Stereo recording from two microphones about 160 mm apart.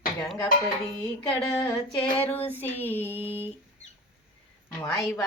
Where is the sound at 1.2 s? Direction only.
30° left (ahead or behind).